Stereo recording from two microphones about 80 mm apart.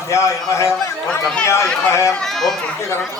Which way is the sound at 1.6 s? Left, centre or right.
Centre.